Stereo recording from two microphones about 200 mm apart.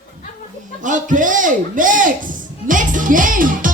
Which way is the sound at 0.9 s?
40° right (ahead or behind).